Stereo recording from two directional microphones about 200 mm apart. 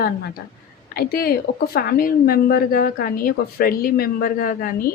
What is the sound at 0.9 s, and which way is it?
A woman's voice, 50° left (ahead or behind).